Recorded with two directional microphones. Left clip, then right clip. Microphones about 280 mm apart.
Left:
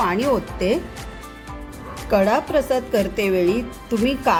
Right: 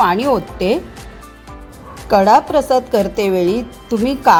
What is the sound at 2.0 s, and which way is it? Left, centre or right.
A woman's voice, right.